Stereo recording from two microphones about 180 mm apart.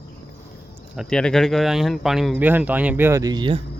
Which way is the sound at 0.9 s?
Centre (ahead or behind).